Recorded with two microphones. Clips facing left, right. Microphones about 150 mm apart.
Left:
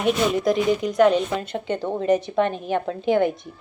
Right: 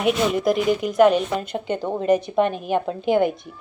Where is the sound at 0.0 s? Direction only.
5° right (ahead or behind).